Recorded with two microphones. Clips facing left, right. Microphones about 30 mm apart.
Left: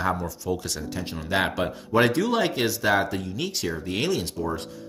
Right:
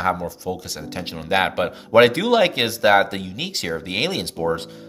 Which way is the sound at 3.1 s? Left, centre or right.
Right.